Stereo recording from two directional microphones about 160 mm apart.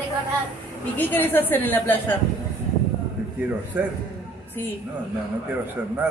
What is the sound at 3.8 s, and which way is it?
Speech, 10° right (ahead or behind).